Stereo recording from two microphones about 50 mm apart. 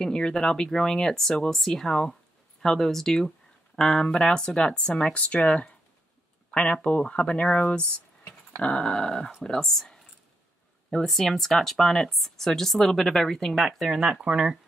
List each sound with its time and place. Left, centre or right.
0.0 s speech: centre
5.1 s speech: left
6.5 s speech: left
11.1 s speech: centre
13.7 s speech: centre